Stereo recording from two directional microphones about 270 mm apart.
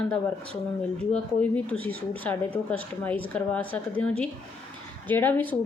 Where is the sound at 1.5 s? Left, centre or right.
Centre.